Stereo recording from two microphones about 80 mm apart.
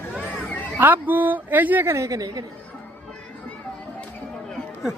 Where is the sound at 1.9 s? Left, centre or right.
Right.